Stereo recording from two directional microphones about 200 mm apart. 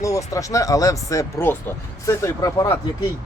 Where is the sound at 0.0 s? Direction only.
15° left (ahead or behind).